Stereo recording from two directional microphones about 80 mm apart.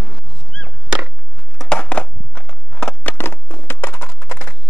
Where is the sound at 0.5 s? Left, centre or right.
Centre.